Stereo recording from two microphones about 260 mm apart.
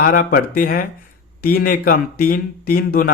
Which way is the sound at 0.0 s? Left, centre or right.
Left.